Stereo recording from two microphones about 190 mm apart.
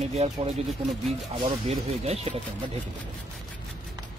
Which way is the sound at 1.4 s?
35° right (ahead or behind).